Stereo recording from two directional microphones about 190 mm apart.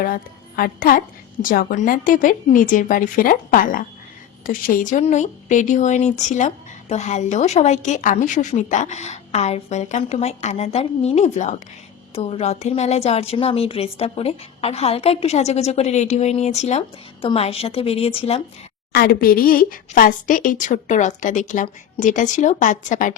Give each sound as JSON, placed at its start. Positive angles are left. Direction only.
{"t": 0.0, "sound": "a woman's voice", "side_deg": 50}
{"t": 18.9, "sound": "a woman's voice", "side_deg": 50}